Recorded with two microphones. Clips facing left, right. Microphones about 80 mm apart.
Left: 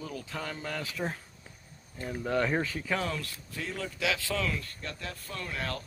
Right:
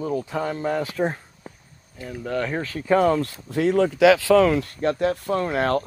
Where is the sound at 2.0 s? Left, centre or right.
Centre.